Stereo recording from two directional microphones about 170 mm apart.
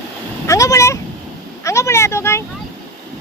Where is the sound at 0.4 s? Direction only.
20° left (ahead or behind).